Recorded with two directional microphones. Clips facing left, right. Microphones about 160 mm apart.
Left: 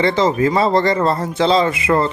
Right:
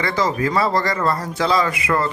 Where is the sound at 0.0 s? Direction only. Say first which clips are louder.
Left 5 dB; 25° left (ahead or behind).